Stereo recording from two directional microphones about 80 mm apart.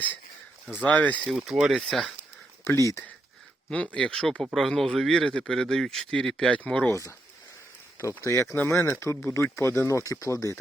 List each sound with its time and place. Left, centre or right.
0.7 s speech: left
1.3 s speech: centre
2.6 s speech: left
3.7 s speech: centre
6.9 s speech: left
8.2 s speech: left